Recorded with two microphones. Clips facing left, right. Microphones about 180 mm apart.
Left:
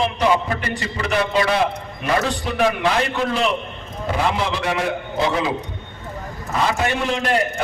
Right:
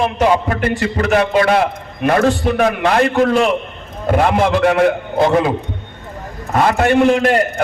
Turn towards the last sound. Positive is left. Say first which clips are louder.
# right 10 dB
turn(degrees=-55)  # may be behind; listen again after turning